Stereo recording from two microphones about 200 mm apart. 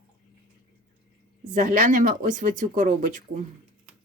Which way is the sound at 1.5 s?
40° right (ahead or behind).